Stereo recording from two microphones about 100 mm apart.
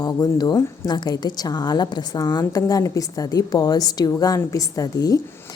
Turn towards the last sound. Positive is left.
turn(degrees=35)  # may be behind; listen again after turning